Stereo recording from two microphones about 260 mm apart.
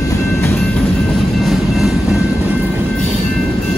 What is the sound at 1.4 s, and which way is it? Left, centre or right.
Train, centre.